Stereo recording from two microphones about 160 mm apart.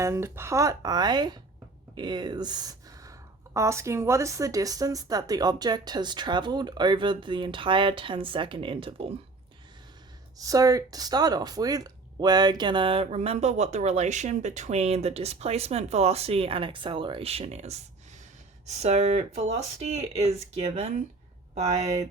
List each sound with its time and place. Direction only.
0.0 s speech: 15° right (ahead or behind); by 9.1 s 35° right (ahead or behind)
10.3 s speech: 20° right (ahead or behind); by 21.8 s 45° right (ahead or behind)